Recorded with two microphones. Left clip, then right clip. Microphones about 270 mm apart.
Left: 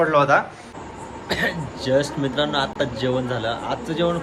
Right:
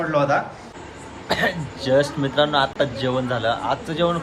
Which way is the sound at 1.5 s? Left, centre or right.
Centre.